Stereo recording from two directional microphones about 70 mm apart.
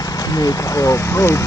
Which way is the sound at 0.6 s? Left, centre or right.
Left.